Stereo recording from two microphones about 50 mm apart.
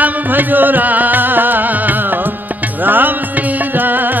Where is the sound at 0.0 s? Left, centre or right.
Right.